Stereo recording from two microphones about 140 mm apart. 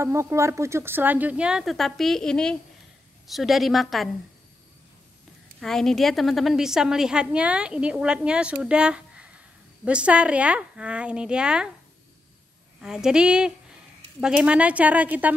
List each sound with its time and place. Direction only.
0.0 s a woman's voice: 20° right (ahead or behind); by 4.1 s centre (ahead or behind)
5.6 s a woman's voice: 5° left (ahead or behind)
12.8 s a woman's voice: 5° right (ahead or behind)